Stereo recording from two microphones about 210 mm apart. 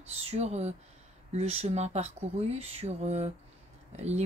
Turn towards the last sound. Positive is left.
turn(degrees=-30)  # may be behind; listen again after turning